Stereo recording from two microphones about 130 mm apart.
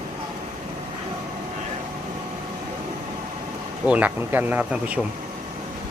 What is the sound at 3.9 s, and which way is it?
Speech, 10° right (ahead or behind).